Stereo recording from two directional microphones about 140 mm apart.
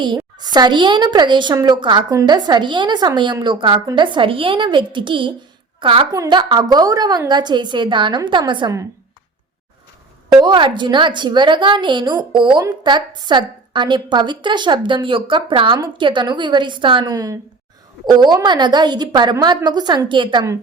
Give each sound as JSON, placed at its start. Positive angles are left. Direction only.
{"t": 0.0, "sound": "a woman's voice", "side_deg": -30}
{"t": 6.1, "sound": "a woman's voice", "side_deg": -30}
{"t": 10.4, "sound": "a woman's voice", "side_deg": -35}